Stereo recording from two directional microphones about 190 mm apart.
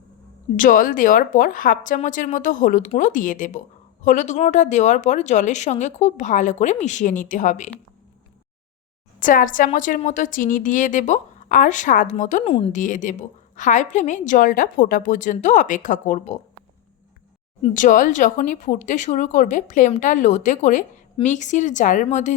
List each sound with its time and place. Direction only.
0.5 s a woman's voice: 45° left (ahead or behind)
9.2 s a woman's voice: 45° left (ahead or behind)
17.6 s speech: 45° left (ahead or behind)